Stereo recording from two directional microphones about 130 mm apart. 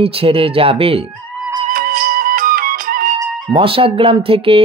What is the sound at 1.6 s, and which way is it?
Music, 90° right.